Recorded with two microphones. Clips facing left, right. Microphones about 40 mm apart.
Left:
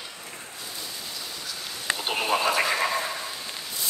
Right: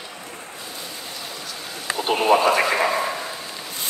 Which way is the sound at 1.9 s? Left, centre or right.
Centre.